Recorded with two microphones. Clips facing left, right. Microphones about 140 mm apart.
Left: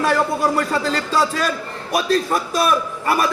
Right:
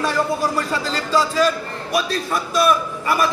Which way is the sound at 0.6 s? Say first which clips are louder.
Left 3 dB; 55° left (ahead or behind).